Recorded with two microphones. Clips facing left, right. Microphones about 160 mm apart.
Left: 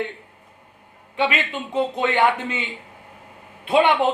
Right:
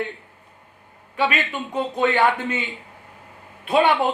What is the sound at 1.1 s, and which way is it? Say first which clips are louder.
A woman's voice: even; 20° left (ahead or behind).